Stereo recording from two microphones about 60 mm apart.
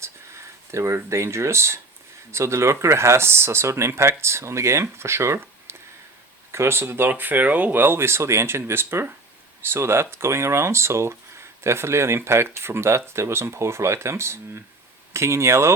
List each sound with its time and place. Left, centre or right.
0.7 s speech: right